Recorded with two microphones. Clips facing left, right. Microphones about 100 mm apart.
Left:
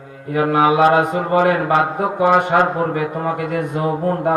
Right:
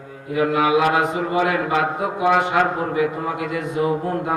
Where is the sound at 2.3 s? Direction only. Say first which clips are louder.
Left 2 dB; 40° left (ahead or behind).